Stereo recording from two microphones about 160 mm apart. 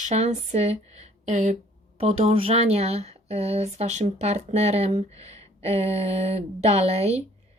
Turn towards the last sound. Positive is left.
turn(degrees=-40)  # may be behind; listen again after turning